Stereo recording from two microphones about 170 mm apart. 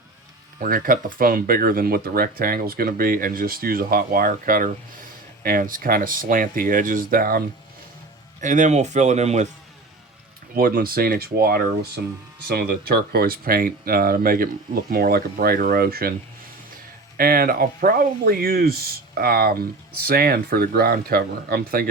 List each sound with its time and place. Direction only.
0.6 s speech: 55° right (ahead or behind)
8.4 s speech: 45° right (ahead or behind)
10.5 s speech: 55° right (ahead or behind)
17.2 s speech: 60° right (ahead or behind)